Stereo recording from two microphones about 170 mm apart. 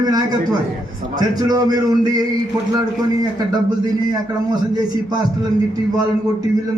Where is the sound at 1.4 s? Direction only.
20° right (ahead or behind).